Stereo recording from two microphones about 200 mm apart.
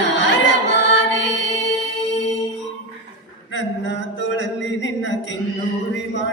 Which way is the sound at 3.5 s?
65° left (ahead or behind).